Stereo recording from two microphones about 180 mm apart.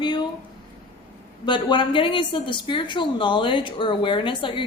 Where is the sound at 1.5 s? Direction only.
25° left (ahead or behind).